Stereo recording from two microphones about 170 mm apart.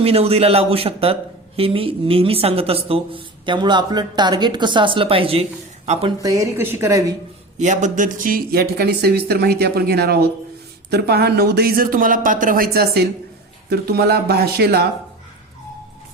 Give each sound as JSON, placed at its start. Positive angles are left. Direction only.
{"t": 0.0, "sound": "a man's voice", "side_deg": -35}
{"t": 6.2, "sound": "speech", "side_deg": -20}
{"t": 7.6, "sound": "speech", "side_deg": -45}